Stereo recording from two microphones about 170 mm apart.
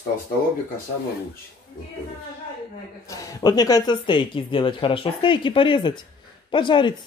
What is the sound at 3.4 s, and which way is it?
Cutlery, 20° left (ahead or behind).